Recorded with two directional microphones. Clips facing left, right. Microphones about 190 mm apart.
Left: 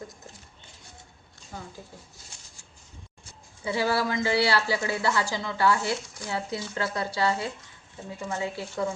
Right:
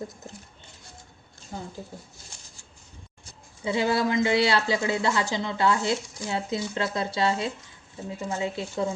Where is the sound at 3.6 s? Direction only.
20° right (ahead or behind).